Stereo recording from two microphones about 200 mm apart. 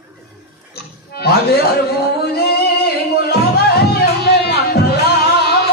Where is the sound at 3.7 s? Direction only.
50° left (ahead or behind).